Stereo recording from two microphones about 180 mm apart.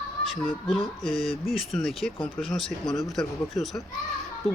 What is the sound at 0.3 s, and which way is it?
Speech, centre (ahead or behind).